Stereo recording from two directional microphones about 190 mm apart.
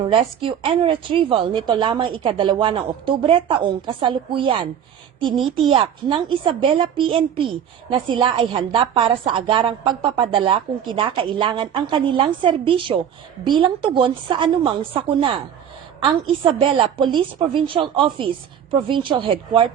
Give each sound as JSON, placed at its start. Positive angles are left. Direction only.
{"t": 0.0, "sound": "a woman's voice", "side_deg": -30}
{"t": 5.6, "sound": "a woman's voice", "side_deg": -25}